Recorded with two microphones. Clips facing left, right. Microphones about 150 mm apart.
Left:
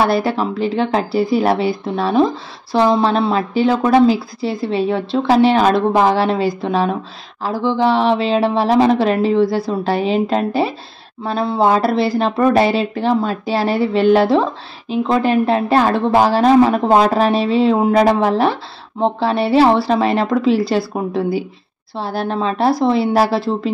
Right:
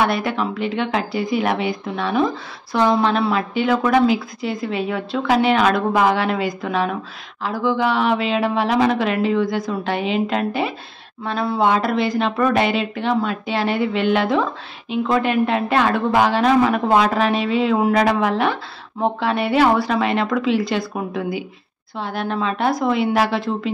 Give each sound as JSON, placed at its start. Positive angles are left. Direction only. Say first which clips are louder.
{"t": 0.0, "sound": "speech", "louder": "left 4 dB", "side_deg": 35}